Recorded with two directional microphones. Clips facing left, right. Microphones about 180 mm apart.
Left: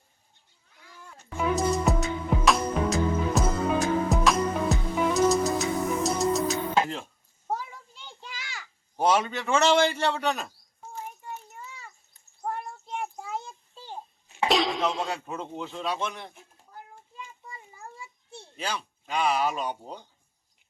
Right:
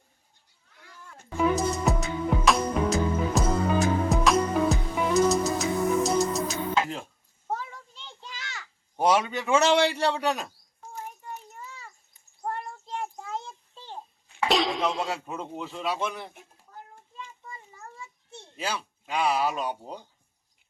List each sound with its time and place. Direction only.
1.5 s music: centre (ahead or behind)
7.4 s a sound: 5° left (ahead or behind)
9.0 s a man's voice: 10° right (ahead or behind)
10.8 s a sound: 5° left (ahead or behind)
12.5 s child singing: 5° left (ahead or behind)
14.3 s cough: 20° left (ahead or behind)
14.5 s speech: centre (ahead or behind)
16.7 s child singing: 10° left (ahead or behind)
18.5 s speech: 5° right (ahead or behind)